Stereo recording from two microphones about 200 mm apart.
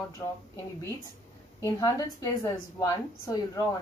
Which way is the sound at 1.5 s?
15° left (ahead or behind).